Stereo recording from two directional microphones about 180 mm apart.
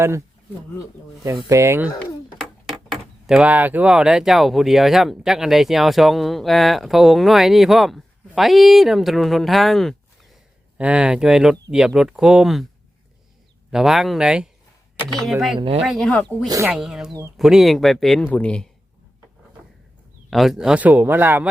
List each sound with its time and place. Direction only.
1.4 s speech: 15° right (ahead or behind)
2.4 s speech: centre (ahead or behind)
13.7 s speech: centre (ahead or behind)
15.5 s speech: 30° right (ahead or behind)
15.8 s speech: centre (ahead or behind)
20.3 s speech: centre (ahead or behind)